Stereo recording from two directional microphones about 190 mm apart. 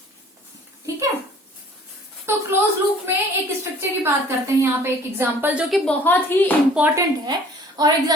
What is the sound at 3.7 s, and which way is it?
A woman's voice, 15° right (ahead or behind).